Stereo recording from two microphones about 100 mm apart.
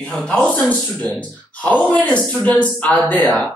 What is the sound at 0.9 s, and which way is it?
Speech, 15° left (ahead or behind).